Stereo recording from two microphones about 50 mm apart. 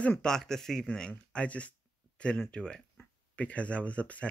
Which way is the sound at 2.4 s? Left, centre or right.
Centre.